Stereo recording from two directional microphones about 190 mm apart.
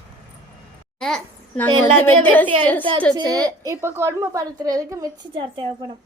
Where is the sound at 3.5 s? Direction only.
15° right (ahead or behind).